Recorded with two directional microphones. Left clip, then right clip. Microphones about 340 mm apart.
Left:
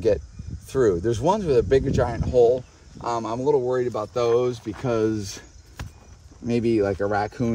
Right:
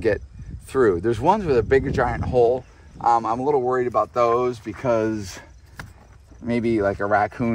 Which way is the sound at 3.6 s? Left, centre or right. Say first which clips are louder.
Right 4 dB; centre.